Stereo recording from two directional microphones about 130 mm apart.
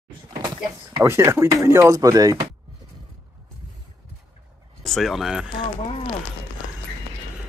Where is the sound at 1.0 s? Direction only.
20° right (ahead or behind).